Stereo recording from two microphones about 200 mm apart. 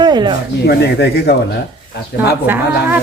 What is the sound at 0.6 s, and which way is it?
Speech, 55° left (ahead or behind).